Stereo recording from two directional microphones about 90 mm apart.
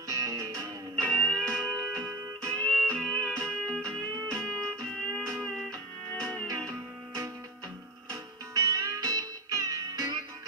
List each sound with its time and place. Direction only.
0.1 s music: 45° right (ahead or behind)
0.9 s music: 15° left (ahead or behind)
8.1 s music: 40° right (ahead or behind)